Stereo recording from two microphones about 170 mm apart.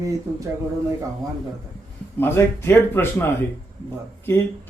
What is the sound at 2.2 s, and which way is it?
Speech, 15° left (ahead or behind).